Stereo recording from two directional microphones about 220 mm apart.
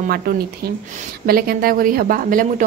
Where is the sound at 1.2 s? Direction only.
40° right (ahead or behind).